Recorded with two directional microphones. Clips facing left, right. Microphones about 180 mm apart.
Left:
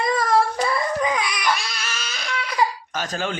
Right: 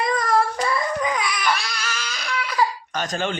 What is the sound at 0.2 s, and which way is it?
Humming, centre (ahead or behind).